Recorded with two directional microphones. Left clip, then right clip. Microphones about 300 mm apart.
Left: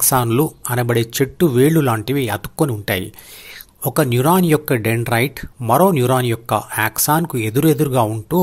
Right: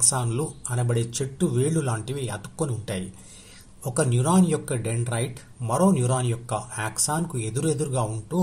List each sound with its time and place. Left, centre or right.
0.1 s speech: left